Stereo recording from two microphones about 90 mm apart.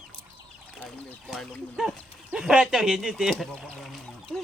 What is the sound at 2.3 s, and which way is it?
Bird, 5° right (ahead or behind).